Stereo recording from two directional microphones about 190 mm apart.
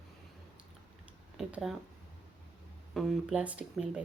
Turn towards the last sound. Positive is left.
turn(degrees=-5)  # may be behind; listen again after turning